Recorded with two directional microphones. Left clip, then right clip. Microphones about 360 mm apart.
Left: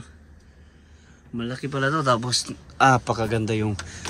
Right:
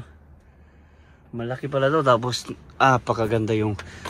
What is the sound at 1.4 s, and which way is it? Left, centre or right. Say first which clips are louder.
Speech: right 3 dB; centre.